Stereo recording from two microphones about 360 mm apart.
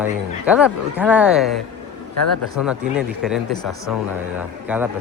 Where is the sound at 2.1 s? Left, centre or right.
Left.